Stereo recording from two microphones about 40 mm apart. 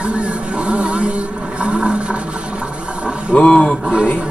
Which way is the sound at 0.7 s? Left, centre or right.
Right.